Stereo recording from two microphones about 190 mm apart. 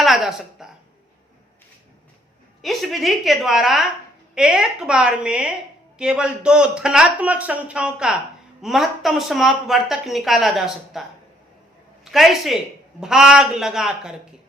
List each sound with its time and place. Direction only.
0.0 s a woman's voice: centre (ahead or behind)
2.6 s a woman's voice: centre (ahead or behind)
12.0 s a woman's voice: centre (ahead or behind)